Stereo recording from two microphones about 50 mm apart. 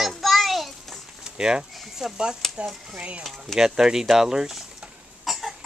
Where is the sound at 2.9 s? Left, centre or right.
Right.